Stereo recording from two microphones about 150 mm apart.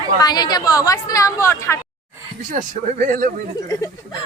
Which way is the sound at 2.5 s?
60° right (ahead or behind).